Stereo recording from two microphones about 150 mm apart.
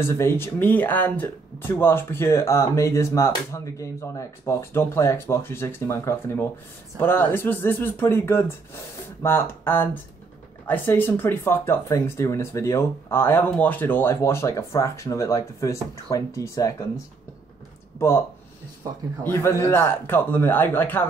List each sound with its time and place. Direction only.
0.0 s speech: 15° left (ahead or behind)
17.9 s speech: 15° left (ahead or behind)
19.2 s speech: 15° left (ahead or behind)